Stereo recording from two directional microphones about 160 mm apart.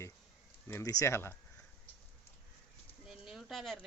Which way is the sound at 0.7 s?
20° left (ahead or behind).